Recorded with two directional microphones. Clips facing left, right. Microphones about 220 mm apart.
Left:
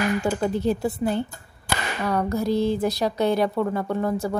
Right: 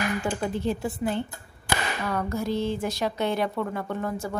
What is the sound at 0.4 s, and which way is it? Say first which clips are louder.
Speech: left 5 dB; 40° left (ahead or behind).